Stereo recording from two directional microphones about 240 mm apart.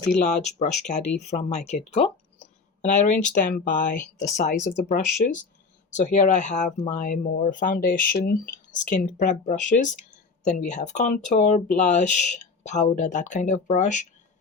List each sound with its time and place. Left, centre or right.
0.2 s speech: left